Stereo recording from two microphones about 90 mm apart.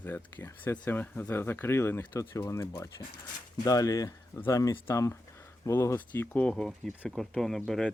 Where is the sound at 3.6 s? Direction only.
40° left (ahead or behind).